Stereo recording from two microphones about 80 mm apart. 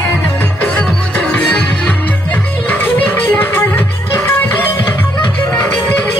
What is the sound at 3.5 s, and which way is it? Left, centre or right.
Music, left.